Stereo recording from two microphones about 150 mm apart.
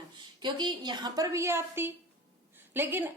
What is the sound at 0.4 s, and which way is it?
A woman's voice, 30° right (ahead or behind).